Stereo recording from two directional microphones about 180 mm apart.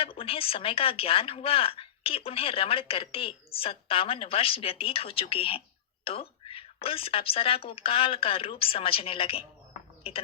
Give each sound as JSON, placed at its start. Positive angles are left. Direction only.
{"t": 0.0, "sound": "speech", "side_deg": 30}